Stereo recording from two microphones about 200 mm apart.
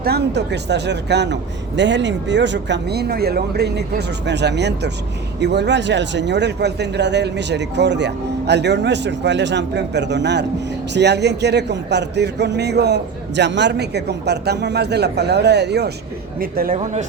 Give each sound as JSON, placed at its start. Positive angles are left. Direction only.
{"t": 0.0, "sound": "a man's voice", "side_deg": -55}
{"t": 16.7, "sound": "speech", "side_deg": -35}